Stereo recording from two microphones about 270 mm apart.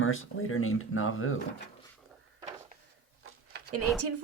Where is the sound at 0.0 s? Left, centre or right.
Left.